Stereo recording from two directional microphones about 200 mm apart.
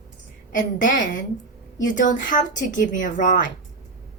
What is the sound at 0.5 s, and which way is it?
Speech, 40° left (ahead or behind).